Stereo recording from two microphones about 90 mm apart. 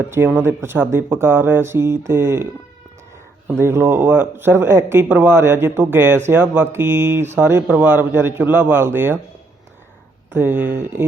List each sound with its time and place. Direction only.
0.4 s speech: 25° right (ahead or behind)
3.6 s speech: 25° right (ahead or behind)
10.3 s speech: 25° right (ahead or behind)